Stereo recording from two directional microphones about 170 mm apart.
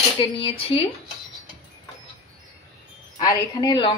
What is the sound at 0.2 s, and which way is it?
Speech, 35° left (ahead or behind).